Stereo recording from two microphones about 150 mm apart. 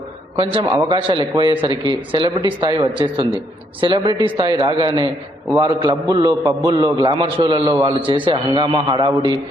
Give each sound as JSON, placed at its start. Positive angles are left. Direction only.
{"t": 0.3, "sound": "a man's voice", "side_deg": -35}